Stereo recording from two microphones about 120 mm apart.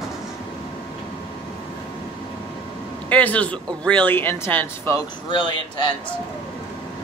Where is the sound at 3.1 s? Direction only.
10° left (ahead or behind).